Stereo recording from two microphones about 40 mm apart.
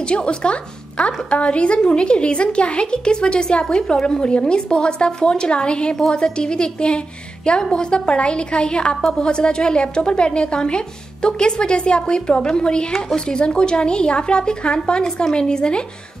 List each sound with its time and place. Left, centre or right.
0.1 s a woman's voice: left